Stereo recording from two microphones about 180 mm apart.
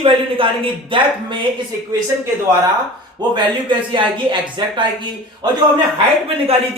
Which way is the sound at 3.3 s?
25° right (ahead or behind).